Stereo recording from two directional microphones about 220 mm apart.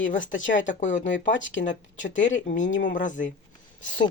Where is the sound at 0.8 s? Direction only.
35° left (ahead or behind).